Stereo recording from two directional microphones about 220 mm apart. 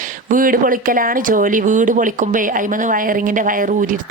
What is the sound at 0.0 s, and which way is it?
Speech, 35° right (ahead or behind).